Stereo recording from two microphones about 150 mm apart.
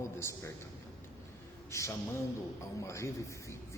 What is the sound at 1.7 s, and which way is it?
A man's voice, 20° left (ahead or behind).